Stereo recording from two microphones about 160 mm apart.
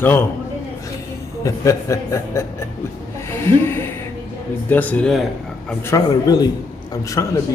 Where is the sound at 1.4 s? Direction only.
20° left (ahead or behind); by 5.7 s centre (ahead or behind).